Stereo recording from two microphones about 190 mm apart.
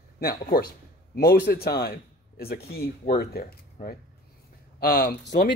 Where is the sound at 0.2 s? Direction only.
55° left (ahead or behind).